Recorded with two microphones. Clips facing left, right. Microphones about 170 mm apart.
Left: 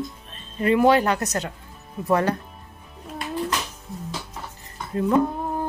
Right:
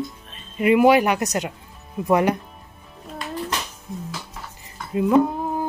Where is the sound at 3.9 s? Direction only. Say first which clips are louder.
Right 5 dB; 20° right (ahead or behind).